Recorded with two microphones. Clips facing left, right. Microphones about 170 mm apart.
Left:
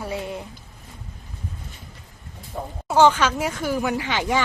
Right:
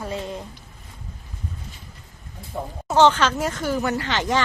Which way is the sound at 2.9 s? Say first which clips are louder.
Even; 10° left (ahead or behind).